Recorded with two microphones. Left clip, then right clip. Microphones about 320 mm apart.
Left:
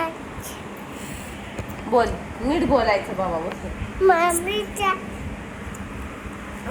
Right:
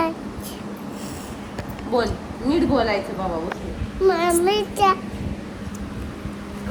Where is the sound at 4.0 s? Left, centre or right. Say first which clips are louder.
Left 2 dB; centre.